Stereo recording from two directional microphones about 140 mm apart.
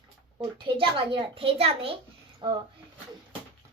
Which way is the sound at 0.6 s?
35° right (ahead or behind).